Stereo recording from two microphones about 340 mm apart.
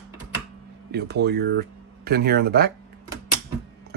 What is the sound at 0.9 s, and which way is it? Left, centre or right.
Speech, right.